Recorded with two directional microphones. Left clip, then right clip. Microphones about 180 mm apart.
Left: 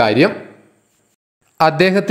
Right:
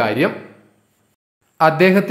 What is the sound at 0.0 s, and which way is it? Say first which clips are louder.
Speech: left 5 dB; 25° left (ahead or behind).